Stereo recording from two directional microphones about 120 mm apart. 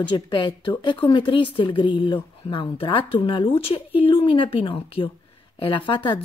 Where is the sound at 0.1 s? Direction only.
40° left (ahead or behind).